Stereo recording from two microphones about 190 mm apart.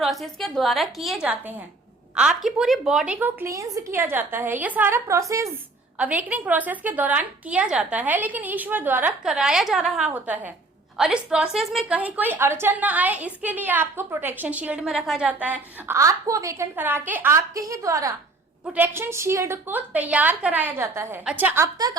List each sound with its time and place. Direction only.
0.0 s a woman's voice: centre (ahead or behind); by 21.9 s 15° right (ahead or behind)